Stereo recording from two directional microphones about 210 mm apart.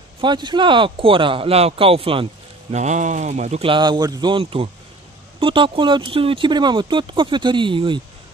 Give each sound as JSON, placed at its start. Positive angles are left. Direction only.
{"t": 0.2, "sound": "speech", "side_deg": -20}